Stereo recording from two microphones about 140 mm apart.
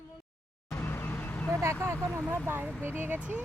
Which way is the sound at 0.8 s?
15° left (ahead or behind).